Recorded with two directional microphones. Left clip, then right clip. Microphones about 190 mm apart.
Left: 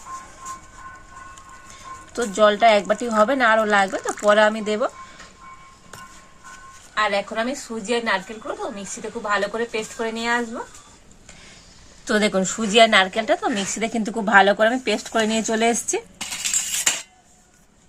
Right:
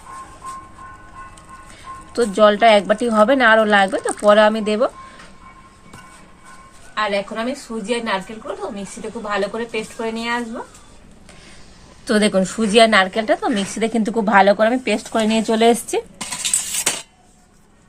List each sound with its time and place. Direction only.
2.1 s speech: 5° right (ahead or behind)
6.9 s a woman's voice: centre (ahead or behind)
12.0 s a woman's voice: centre (ahead or behind)
16.3 s a sound: 30° right (ahead or behind)